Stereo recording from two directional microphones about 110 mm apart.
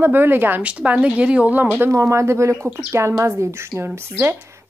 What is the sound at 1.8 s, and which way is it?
Speech, 25° right (ahead or behind).